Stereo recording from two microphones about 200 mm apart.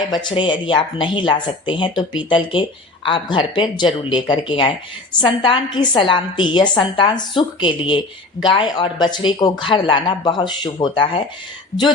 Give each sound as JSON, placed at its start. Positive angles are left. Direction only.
{"t": 0.1, "sound": "a woman's voice", "side_deg": 20}